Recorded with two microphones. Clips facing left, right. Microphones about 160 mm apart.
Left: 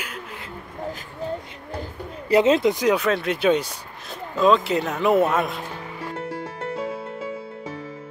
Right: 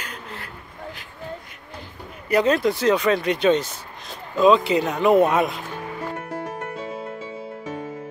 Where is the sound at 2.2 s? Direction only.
25° left (ahead or behind); by 5.5 s centre (ahead or behind).